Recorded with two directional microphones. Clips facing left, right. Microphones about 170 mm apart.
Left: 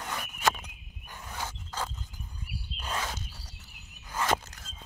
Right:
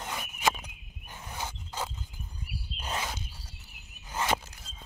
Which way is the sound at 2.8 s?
15° right (ahead or behind).